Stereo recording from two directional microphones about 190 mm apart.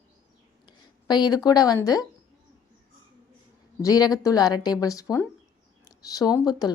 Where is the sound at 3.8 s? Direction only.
20° left (ahead or behind).